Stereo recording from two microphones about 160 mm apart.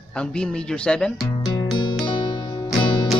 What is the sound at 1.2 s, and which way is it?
Music, 25° left (ahead or behind).